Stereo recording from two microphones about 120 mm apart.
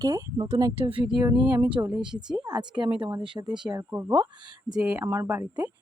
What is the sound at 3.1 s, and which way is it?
Speech, 40° right (ahead or behind).